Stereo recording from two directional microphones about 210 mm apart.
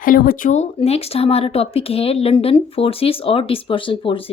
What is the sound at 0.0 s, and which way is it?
Speech, 40° left (ahead or behind).